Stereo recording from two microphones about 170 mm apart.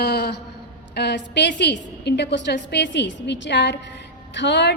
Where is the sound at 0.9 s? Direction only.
85° left.